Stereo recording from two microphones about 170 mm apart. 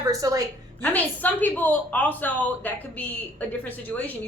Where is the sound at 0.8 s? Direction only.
10° left (ahead or behind).